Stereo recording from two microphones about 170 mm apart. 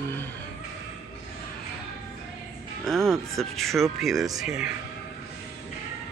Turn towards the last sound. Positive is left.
turn(degrees=-5)  # may be behind; listen again after turning